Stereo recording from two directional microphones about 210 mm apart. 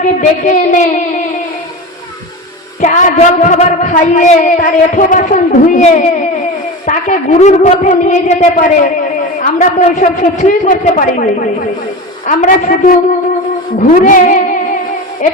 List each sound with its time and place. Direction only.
0.0 s a man's voice: 35° left (ahead or behind)
2.8 s a man's voice: 35° left (ahead or behind)